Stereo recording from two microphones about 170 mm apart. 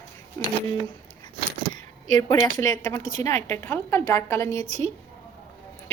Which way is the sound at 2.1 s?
20° left (ahead or behind).